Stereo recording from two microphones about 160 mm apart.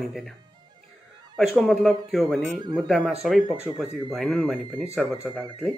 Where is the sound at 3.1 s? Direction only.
Centre (ahead or behind).